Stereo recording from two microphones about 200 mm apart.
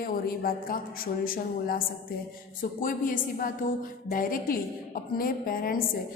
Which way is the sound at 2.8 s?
45° left (ahead or behind).